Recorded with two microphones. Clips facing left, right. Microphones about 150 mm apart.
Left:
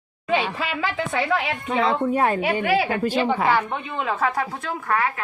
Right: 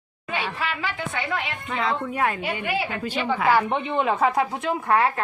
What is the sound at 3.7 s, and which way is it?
A woman's voice, 25° right (ahead or behind).